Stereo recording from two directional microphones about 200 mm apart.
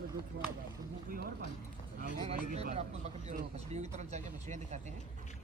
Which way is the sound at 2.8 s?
35° right (ahead or behind).